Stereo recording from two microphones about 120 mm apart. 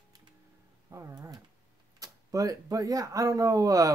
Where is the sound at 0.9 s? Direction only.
25° right (ahead or behind).